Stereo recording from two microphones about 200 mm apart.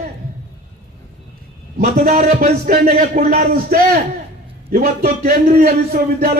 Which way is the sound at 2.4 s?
45° right (ahead or behind).